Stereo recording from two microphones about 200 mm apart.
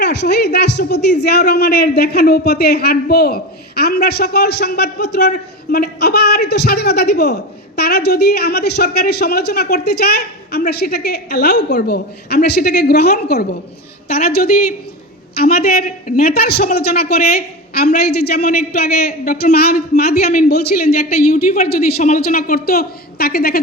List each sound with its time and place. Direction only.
0.0 s a woman's voice: 55° left (ahead or behind)